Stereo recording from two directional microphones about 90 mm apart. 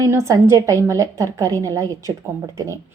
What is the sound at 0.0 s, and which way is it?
A woman's voice, 30° right (ahead or behind).